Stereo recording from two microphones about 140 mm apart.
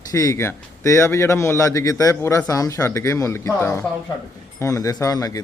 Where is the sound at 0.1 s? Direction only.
25° left (ahead or behind).